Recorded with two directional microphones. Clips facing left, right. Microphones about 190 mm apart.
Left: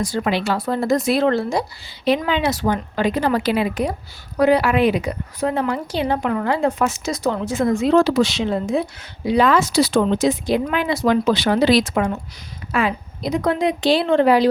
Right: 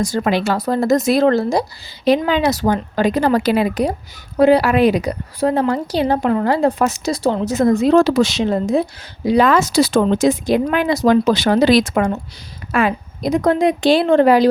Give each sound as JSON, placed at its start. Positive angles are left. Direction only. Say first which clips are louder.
{"t": 0.0, "sound": "a woman's voice", "louder": "right 3 dB", "side_deg": -45}